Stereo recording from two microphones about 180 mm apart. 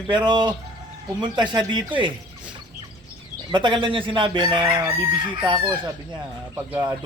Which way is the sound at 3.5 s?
25° right (ahead or behind).